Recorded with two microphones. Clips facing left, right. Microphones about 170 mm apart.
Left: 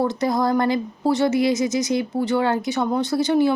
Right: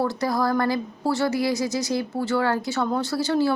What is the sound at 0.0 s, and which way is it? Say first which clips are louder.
A woman's voice: left 3 dB; 20° left (ahead or behind).